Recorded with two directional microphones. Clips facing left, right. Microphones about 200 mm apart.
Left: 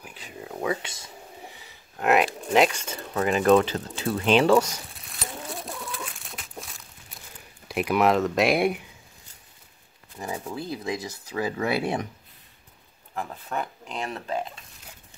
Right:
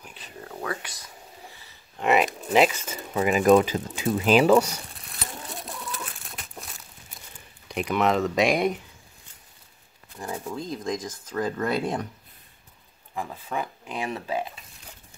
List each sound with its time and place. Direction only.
0.0 s a sound: 10° left (ahead or behind)
2.0 s speech: centre (ahead or behind)
4.9 s a sound: centre (ahead or behind)
5.7 s bird: centre (ahead or behind)
7.6 s speech: 5° left (ahead or behind)
10.1 s speech: 10° left (ahead or behind)
13.1 s speech: 5° right (ahead or behind)